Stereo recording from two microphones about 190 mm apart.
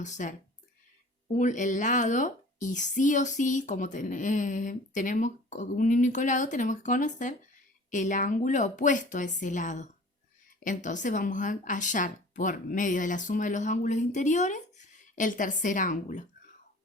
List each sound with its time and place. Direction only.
0.0 s a woman's voice: 40° left (ahead or behind)